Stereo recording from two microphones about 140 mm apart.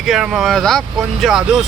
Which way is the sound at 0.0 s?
Centre (ahead or behind).